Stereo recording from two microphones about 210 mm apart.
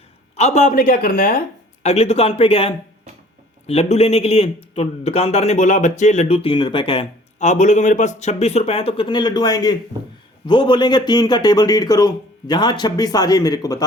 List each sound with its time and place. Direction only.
0.3 s speech: 30° left (ahead or behind)
1.8 s a man's voice: 30° left (ahead or behind)